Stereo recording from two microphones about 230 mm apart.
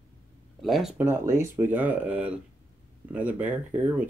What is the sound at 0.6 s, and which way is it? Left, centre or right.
Speech, centre.